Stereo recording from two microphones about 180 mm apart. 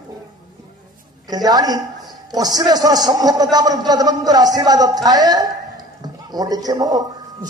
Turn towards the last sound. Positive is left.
turn(degrees=-20)  # may be behind; listen again after turning